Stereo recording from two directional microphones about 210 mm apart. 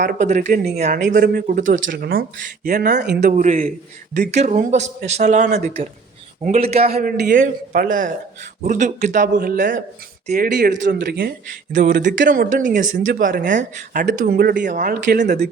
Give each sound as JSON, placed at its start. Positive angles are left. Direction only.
{"t": 0.0, "sound": "speech", "side_deg": -40}
{"t": 3.0, "sound": "a man's voice", "side_deg": -50}
{"t": 7.0, "sound": "speech", "side_deg": -45}